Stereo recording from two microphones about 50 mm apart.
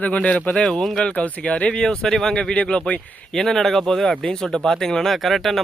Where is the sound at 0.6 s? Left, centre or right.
Centre.